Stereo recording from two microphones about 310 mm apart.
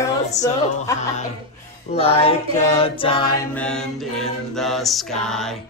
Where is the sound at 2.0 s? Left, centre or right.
Centre.